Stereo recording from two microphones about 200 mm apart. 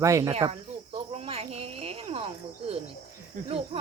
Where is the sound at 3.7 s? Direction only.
30° right (ahead or behind).